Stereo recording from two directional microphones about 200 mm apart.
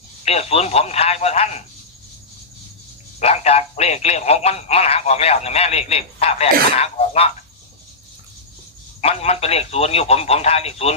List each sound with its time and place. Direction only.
0.3 s speech: 30° left (ahead or behind)
3.2 s speech: 30° left (ahead or behind)
9.0 s speech: 30° left (ahead or behind)